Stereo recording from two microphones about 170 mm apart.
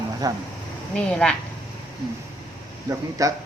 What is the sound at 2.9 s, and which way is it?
Speech, 20° right (ahead or behind).